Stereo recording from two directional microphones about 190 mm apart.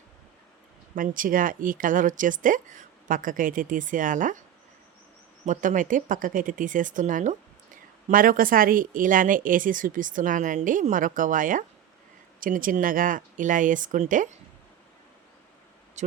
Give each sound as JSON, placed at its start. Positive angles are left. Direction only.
{"t": 0.9, "sound": "speech", "side_deg": -45}
{"t": 5.5, "sound": "speech", "side_deg": -45}
{"t": 16.0, "sound": "speech", "side_deg": -40}